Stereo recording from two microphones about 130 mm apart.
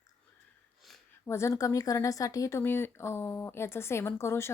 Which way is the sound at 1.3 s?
20° left (ahead or behind).